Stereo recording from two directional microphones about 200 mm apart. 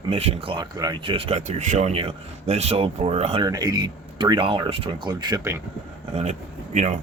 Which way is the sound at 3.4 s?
20° right (ahead or behind).